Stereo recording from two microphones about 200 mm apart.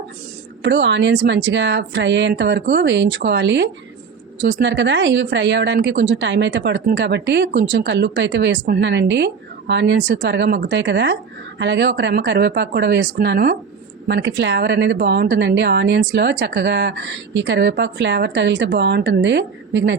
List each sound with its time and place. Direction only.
0.6 s speech: 65° right (ahead or behind)